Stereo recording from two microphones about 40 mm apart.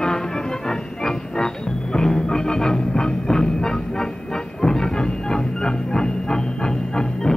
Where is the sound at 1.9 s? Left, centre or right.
Centre.